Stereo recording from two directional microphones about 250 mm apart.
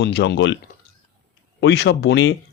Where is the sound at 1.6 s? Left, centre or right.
Left.